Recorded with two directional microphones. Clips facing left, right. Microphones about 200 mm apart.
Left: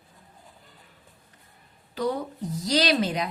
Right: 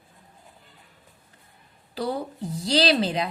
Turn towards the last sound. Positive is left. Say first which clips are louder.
# right 2 dB
turn(degrees=-30)  # may be behind; listen again after turning